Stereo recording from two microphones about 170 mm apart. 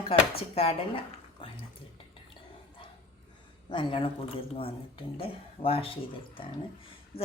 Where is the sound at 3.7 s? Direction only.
30° left (ahead or behind).